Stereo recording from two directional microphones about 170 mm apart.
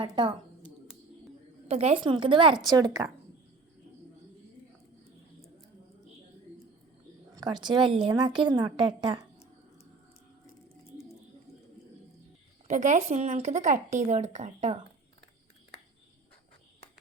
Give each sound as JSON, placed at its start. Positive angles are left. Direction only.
{"t": 0.0, "sound": "a woman's voice", "side_deg": -30}
{"t": 1.6, "sound": "a woman's voice", "side_deg": -35}
{"t": 7.3, "sound": "a woman's voice", "side_deg": -25}
{"t": 12.6, "sound": "speech", "side_deg": -45}